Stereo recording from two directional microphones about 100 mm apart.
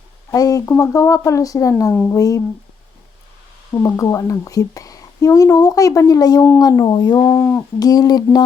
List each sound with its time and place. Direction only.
0.3 s a woman's voice: 35° left (ahead or behind)
1.9 s speech: 20° left (ahead or behind)
2.1 s a woman's voice: 35° left (ahead or behind)
3.7 s a woman's voice: 35° left (ahead or behind)
7.3 s a sound: 20° left (ahead or behind)
7.8 s a woman's voice: 40° left (ahead or behind)